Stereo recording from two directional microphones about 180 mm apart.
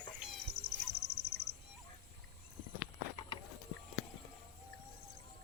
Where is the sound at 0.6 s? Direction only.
70° right (ahead or behind).